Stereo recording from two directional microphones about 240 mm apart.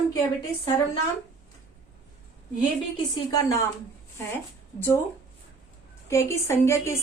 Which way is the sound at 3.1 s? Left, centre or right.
Centre.